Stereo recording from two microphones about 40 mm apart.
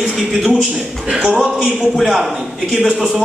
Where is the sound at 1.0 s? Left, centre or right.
Right.